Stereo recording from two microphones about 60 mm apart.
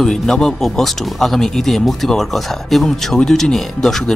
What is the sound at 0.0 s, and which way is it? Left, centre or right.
Speech, centre.